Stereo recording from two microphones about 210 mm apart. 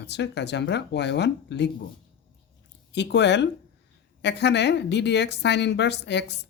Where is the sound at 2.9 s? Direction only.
55° left (ahead or behind).